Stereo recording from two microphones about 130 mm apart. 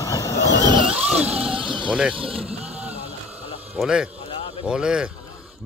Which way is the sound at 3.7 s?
5° right (ahead or behind).